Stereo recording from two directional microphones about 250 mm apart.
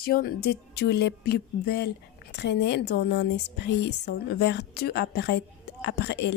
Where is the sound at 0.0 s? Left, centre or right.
Left.